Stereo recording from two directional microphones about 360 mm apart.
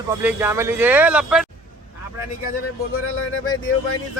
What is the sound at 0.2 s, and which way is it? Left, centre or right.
Speech, centre.